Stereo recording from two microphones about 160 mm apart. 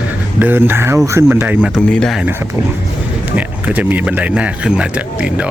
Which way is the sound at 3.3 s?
10° right (ahead or behind).